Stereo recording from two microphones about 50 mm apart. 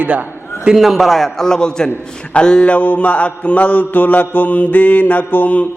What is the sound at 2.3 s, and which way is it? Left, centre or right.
Mantra, centre.